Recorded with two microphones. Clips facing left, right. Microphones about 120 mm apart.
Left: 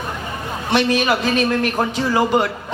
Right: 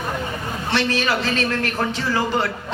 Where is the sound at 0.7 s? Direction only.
15° left (ahead or behind).